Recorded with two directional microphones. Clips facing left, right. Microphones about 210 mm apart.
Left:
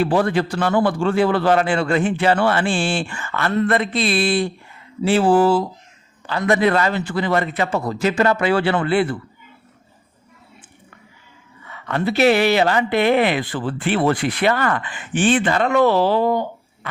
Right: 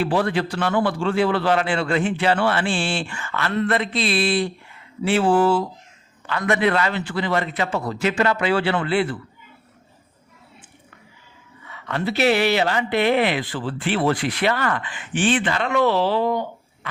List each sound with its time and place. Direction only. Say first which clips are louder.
0.0 s speech: left 3 dB; 45° left (ahead or behind)
5.0 s speech: left 3 dB; 35° left (ahead or behind)
11.7 s speech: left 3 dB; 50° left (ahead or behind)